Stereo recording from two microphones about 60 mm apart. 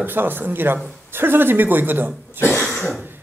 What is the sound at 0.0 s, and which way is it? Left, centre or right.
Speech, right.